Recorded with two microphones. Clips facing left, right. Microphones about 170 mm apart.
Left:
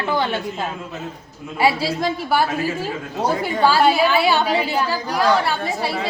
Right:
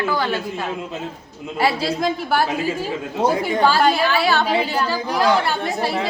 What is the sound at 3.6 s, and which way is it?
A woman's voice, 5° left (ahead or behind).